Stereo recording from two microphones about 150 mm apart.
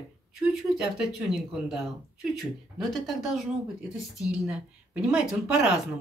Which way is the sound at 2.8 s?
Centre (ahead or behind).